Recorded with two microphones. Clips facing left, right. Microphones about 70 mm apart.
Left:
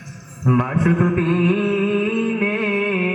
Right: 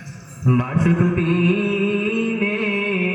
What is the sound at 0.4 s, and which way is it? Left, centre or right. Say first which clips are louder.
Music: left 1 dB; left.